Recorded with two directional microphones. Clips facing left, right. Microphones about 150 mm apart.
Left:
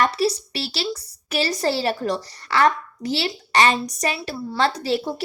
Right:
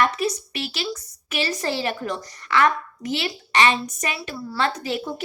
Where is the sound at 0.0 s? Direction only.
35° left (ahead or behind).